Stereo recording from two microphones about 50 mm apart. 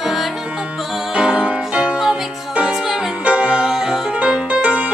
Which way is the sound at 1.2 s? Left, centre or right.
Centre.